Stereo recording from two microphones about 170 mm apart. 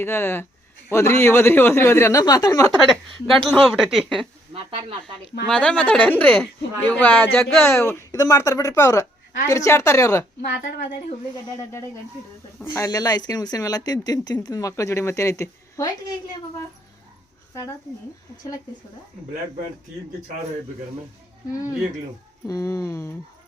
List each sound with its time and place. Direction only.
0.0 s speech: 15° left (ahead or behind)
2.8 s a woman's voice: centre (ahead or behind)
4.5 s speech: 30° right (ahead or behind)
5.5 s speech: 5° left (ahead or behind)
12.7 s speech: 20° left (ahead or behind)
22.4 s speech: 20° left (ahead or behind)